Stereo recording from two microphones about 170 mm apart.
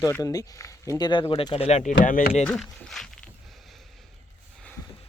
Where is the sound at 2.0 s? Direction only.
55° left (ahead or behind).